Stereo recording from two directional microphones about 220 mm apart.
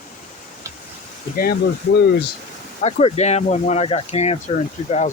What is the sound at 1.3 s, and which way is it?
Speech, 45° left (ahead or behind).